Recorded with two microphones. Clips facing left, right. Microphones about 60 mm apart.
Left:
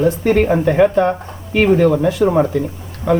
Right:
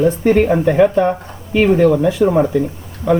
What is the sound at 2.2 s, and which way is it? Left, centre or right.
Speech, centre.